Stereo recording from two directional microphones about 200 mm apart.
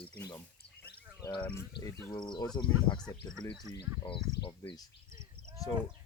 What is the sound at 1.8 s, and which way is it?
Speech, 55° left (ahead or behind).